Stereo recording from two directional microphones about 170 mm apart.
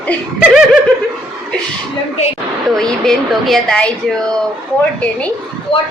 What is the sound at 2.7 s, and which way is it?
A woman's voice, centre (ahead or behind).